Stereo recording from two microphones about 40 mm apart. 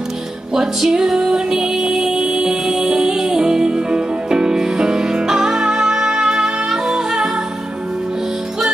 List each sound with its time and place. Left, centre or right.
0.6 s music: centre